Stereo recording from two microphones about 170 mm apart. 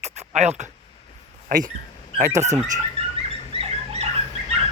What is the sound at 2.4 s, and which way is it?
Speech, 40° right (ahead or behind).